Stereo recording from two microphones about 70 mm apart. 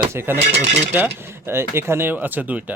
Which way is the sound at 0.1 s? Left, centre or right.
Right.